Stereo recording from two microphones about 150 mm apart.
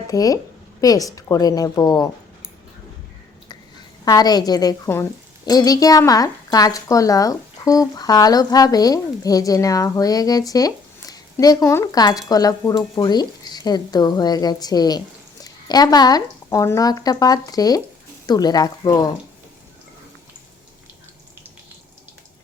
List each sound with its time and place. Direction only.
0.1 s speech: 25° left (ahead or behind)
4.0 s speech: 25° left (ahead or behind)